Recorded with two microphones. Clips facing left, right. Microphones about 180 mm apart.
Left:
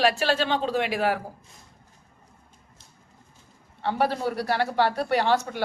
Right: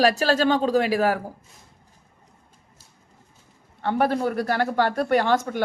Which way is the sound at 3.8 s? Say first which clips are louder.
Right 3 dB; 50° right (ahead or behind).